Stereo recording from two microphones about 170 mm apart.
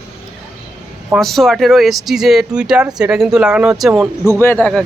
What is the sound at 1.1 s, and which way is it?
Speech, centre (ahead or behind).